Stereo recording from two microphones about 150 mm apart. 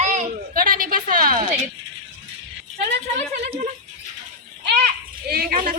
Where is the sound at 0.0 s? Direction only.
55° right (ahead or behind).